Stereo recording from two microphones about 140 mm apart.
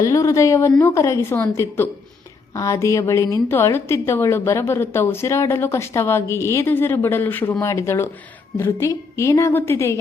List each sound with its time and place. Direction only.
0.0 s a woman's voice: 20° left (ahead or behind)